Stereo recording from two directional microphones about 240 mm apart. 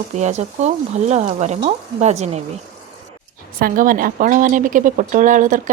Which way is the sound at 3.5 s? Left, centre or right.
Right.